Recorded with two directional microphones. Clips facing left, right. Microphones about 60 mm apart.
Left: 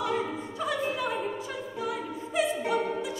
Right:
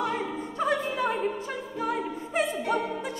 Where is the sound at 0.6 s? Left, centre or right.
Right.